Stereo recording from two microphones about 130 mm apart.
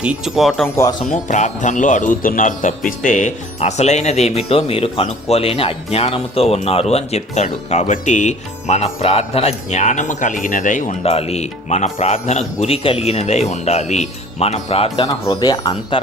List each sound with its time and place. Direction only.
0.0 s speech: 5° right (ahead or behind)
1.1 s speech: 65° left (ahead or behind)
11.0 s speech: 50° left (ahead or behind)
12.5 s speech: 50° left (ahead or behind)
15.0 s speech: 30° left (ahead or behind)